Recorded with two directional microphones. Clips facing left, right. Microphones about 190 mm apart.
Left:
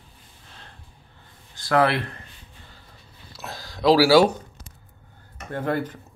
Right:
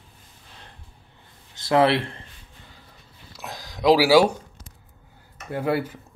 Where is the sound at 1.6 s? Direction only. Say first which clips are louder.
Right 2 dB; 25° right (ahead or behind).